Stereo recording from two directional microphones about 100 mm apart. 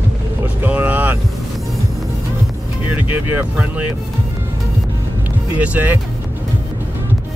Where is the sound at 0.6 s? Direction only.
20° right (ahead or behind).